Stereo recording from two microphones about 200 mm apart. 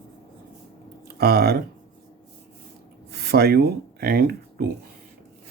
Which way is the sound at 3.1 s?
55° right (ahead or behind).